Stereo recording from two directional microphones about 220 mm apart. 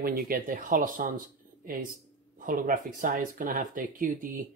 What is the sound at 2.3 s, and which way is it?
Speech, 40° right (ahead or behind).